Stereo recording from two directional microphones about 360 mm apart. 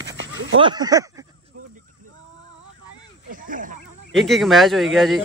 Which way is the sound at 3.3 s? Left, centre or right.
Right.